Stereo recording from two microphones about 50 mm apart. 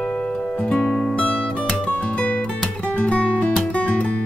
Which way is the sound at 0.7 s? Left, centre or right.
Centre.